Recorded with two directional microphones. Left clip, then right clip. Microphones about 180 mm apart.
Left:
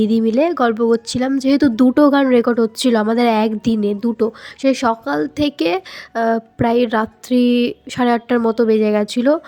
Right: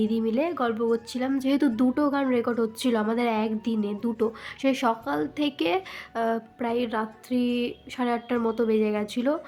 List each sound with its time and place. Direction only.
0.0 s speech: 40° left (ahead or behind)